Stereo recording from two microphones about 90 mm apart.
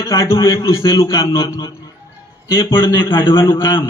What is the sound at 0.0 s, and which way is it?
A man's voice, 40° left (ahead or behind).